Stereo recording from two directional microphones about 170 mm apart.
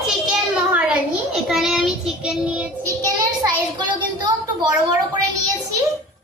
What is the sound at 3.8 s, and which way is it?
Speech, 25° right (ahead or behind).